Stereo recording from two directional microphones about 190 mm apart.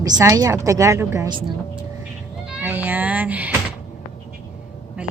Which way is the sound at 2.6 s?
10° right (ahead or behind).